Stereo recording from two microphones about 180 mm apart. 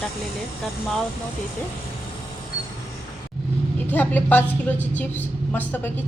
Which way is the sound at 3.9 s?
10° left (ahead or behind).